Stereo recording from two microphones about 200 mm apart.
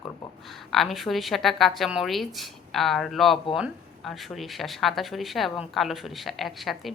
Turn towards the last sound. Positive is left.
turn(degrees=0)  # may be behind; listen again after turning